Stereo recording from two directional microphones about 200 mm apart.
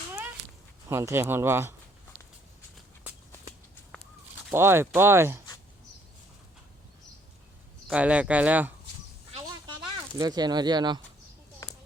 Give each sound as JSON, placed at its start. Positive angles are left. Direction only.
{"t": 0.9, "sound": "speech", "side_deg": -15}
{"t": 4.5, "sound": "speech", "side_deg": -10}
{"t": 7.9, "sound": "speech", "side_deg": -5}
{"t": 10.2, "sound": "speech", "side_deg": -20}
{"t": 11.6, "sound": "a sound", "side_deg": 15}